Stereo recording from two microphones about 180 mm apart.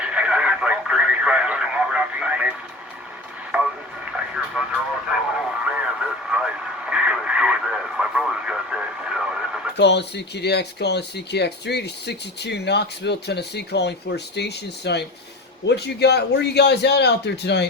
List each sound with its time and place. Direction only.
0.0 s radio: 5° right (ahead or behind)
4.6 s speech: 5° right (ahead or behind)
5.6 s radio: 5° right (ahead or behind)
9.7 s speech: 70° left (ahead or behind)